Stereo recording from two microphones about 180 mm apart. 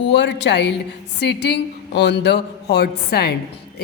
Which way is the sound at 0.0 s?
75° left (ahead or behind).